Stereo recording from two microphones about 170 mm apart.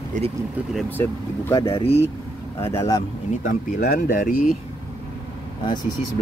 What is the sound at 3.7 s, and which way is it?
Speech, 70° left (ahead or behind).